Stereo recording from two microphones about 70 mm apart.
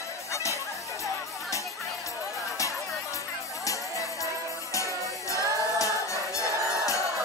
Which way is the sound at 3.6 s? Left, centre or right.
Left.